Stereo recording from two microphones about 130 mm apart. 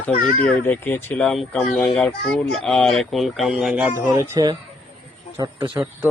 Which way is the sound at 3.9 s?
20° right (ahead or behind).